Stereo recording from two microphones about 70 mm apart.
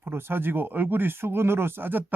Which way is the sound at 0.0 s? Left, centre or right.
Right.